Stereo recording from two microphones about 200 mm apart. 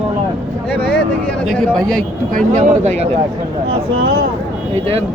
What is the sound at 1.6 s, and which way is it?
Moo, 5° left (ahead or behind).